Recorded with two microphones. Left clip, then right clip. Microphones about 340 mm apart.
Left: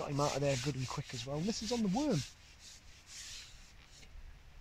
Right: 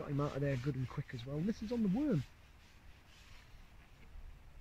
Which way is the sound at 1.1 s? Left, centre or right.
Left.